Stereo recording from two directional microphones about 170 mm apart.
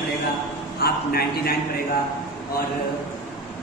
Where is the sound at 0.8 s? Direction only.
65° left (ahead or behind).